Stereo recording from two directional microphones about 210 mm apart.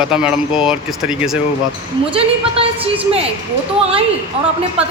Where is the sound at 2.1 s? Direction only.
25° right (ahead or behind).